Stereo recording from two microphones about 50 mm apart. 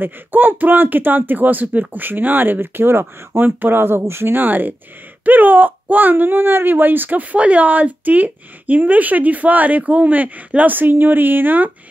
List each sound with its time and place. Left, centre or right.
0.0 s speech: right